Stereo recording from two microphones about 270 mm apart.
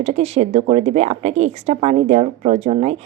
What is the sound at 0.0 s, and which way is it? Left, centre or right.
A woman's voice, right.